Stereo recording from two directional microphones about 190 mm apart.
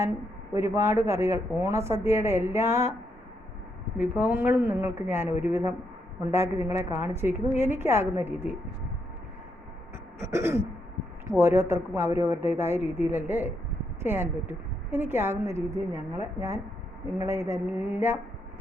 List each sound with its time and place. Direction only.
0.0 s a woman's voice: 15° right (ahead or behind)
2.6 s speech: 35° left (ahead or behind)
3.9 s a woman's voice: 10° right (ahead or behind)
10.2 s a woman's voice: 15° right (ahead or behind)